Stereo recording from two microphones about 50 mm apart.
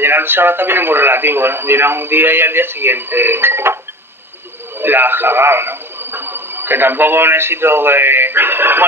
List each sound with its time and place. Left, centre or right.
0.0 s speech: right
4.7 s a man's voice: right